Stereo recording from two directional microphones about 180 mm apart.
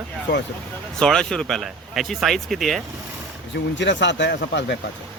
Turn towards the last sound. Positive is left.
turn(degrees=80)